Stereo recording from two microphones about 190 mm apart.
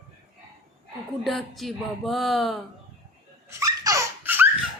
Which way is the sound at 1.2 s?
Centre (ahead or behind).